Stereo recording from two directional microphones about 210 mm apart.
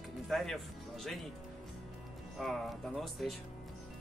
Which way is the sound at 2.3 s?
Centre (ahead or behind).